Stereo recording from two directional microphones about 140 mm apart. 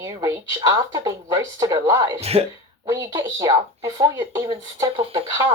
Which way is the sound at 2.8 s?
25° right (ahead or behind).